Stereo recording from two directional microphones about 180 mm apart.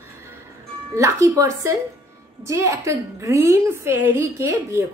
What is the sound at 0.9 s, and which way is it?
A woman's voice, 15° right (ahead or behind).